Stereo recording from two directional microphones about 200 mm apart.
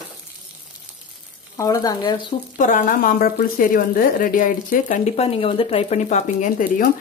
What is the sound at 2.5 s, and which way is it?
Speech, 40° left (ahead or behind).